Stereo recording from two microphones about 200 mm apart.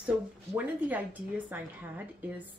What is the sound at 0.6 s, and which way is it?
A woman's voice, 10° right (ahead or behind).